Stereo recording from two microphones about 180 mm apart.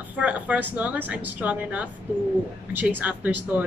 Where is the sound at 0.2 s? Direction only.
10° right (ahead or behind).